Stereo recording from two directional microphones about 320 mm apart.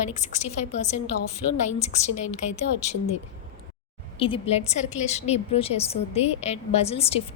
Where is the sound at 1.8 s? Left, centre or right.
Left.